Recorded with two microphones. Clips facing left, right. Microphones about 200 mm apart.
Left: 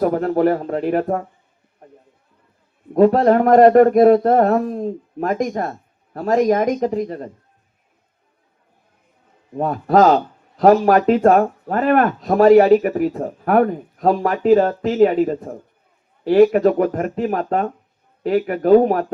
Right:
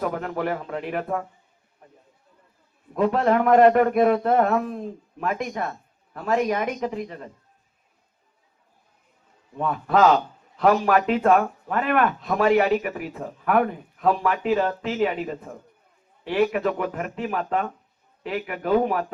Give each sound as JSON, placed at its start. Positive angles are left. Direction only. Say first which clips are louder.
{"t": 0.0, "sound": "speech", "louder": "left 10 dB", "side_deg": 40}
{"t": 2.9, "sound": "speech", "louder": "left 8 dB", "side_deg": 40}
{"t": 9.6, "sound": "speech", "louder": "left 5 dB", "side_deg": 40}